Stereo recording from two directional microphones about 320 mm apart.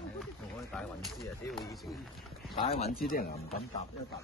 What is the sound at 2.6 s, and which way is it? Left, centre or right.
Speech, centre.